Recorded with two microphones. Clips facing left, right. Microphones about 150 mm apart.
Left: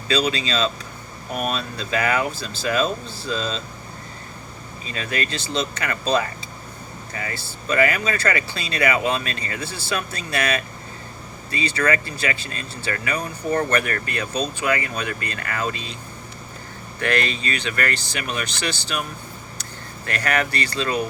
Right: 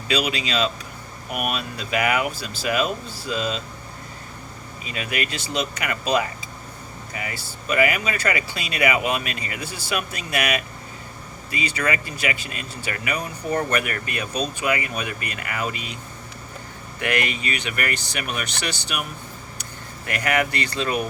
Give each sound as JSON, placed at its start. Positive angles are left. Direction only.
{"t": 0.1, "sound": "speech", "side_deg": -15}
{"t": 4.9, "sound": "speech", "side_deg": -15}
{"t": 17.0, "sound": "speech", "side_deg": -15}
{"t": 20.1, "sound": "speech", "side_deg": -15}